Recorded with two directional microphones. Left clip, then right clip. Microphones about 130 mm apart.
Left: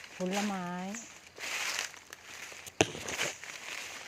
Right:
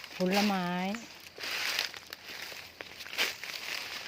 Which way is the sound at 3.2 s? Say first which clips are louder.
Right 7 dB; 35° right (ahead or behind).